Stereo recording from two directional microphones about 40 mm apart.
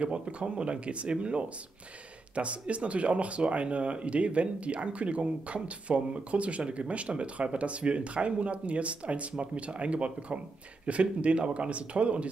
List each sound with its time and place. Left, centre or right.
0.0 s speech: right